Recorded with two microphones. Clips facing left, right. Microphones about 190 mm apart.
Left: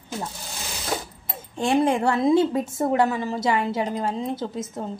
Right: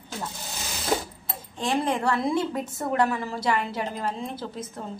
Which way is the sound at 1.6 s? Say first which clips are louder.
Left 5 dB; 25° left (ahead or behind).